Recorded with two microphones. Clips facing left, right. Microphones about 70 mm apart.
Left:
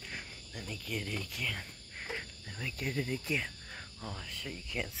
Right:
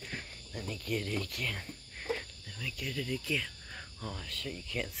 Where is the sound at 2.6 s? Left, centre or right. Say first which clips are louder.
Left 2 dB; left.